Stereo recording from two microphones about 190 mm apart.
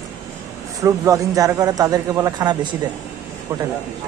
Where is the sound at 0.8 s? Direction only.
20° right (ahead or behind).